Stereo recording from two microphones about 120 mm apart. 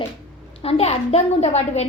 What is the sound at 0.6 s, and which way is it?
A child's voice, 55° left (ahead or behind).